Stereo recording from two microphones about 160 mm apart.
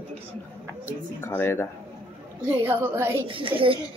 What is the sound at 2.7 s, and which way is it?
Speech, 15° right (ahead or behind).